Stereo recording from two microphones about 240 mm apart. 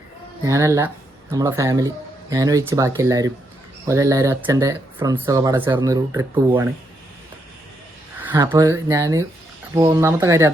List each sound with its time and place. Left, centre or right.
0.4 s speech: centre
8.3 s speech: centre